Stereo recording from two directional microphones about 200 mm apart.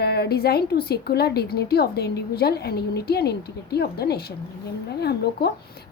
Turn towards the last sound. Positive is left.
turn(degrees=55)  # may be behind; listen again after turning